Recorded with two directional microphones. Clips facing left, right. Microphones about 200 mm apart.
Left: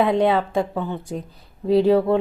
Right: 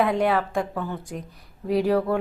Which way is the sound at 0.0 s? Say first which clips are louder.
Left 3 dB; 25° left (ahead or behind).